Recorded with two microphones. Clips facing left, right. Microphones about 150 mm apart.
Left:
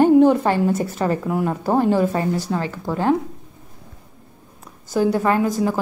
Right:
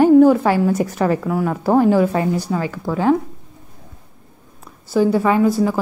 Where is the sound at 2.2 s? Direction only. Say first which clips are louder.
Right 2 dB; 10° right (ahead or behind).